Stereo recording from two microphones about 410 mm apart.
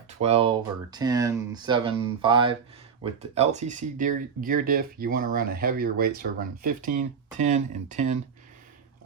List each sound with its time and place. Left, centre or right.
0.2 s speech: centre